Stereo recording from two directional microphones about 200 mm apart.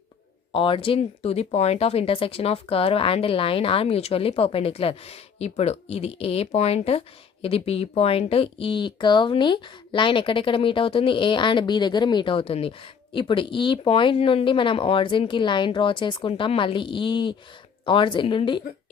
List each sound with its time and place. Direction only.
0.5 s speech: 25° left (ahead or behind)